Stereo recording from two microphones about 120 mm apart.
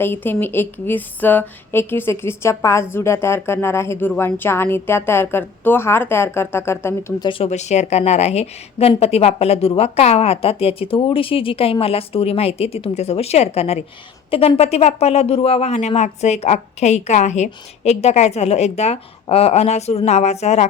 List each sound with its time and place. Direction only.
0.0 s speech: 20° left (ahead or behind)
7.2 s speech: 45° left (ahead or behind)
7.4 s speech: 70° left (ahead or behind)